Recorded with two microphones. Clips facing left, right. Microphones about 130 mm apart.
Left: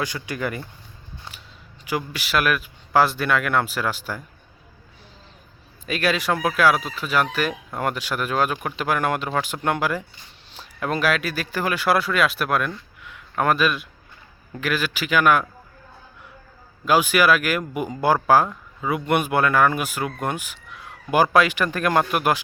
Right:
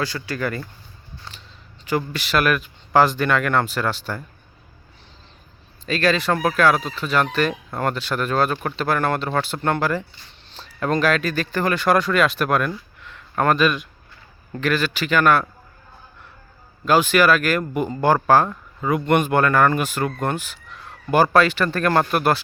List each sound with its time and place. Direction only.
0.0 s speech: 15° left (ahead or behind)
1.8 s speech: 10° left (ahead or behind)
5.8 s speech: 10° left (ahead or behind)
16.8 s speech: 10° left (ahead or behind)